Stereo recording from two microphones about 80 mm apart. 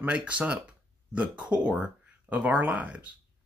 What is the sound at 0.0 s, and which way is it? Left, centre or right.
Speech, centre.